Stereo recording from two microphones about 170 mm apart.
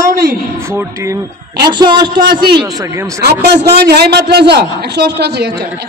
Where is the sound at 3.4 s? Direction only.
70° right (ahead or behind).